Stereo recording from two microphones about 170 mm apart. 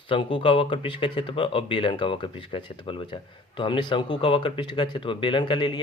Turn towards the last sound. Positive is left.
turn(degrees=25)  # may be behind; listen again after turning